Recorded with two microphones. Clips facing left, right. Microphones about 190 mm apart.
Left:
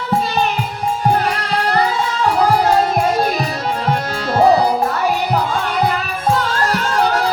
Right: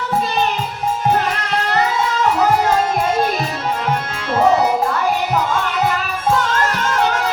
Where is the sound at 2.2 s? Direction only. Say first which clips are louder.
Left 2 dB; 35° left (ahead or behind).